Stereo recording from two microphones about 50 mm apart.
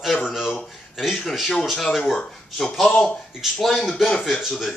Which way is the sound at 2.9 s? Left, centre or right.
Left.